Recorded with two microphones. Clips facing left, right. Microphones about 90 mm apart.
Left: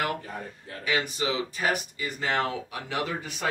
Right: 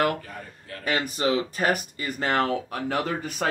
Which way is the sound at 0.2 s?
20° left (ahead or behind).